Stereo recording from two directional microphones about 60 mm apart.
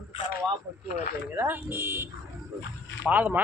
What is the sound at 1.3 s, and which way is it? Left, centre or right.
Speech, right.